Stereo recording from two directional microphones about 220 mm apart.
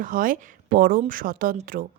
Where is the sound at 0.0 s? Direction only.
40° right (ahead or behind).